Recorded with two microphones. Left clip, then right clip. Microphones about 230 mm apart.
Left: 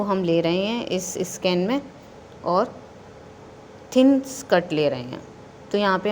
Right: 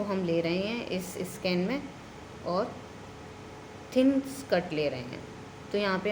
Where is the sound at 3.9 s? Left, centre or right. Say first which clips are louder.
Left 8 dB; left.